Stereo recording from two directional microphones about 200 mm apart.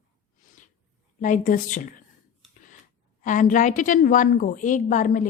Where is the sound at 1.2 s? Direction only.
40° left (ahead or behind).